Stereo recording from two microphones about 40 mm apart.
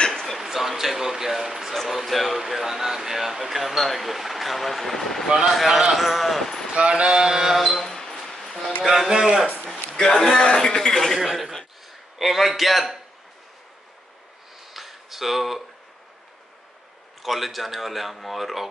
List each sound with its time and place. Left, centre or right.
0.1 s a sound: centre
0.4 s speech: centre
5.6 s speech: centre
6.7 s mantra: right
7.5 s a sound: centre
9.1 s a man's voice: centre
9.8 s a man's voice: centre
12.2 s speech: centre
14.7 s a sound: centre
17.2 s speech: centre